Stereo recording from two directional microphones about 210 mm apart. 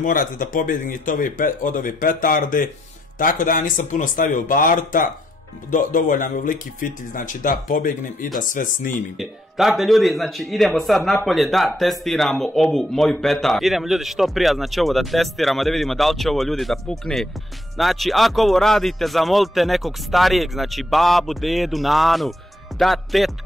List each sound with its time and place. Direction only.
0.0 s speech: 40° left (ahead or behind)
9.1 s speech: centre (ahead or behind)